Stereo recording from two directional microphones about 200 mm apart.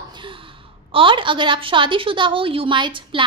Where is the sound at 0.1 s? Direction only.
25° right (ahead or behind).